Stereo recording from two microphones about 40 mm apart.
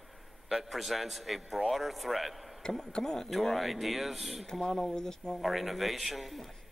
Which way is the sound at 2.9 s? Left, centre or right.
Centre.